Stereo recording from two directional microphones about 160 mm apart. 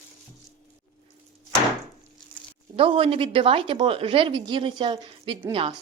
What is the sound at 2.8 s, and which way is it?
A woman's voice, 35° right (ahead or behind).